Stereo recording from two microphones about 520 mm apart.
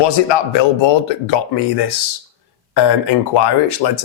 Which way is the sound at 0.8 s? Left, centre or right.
Left.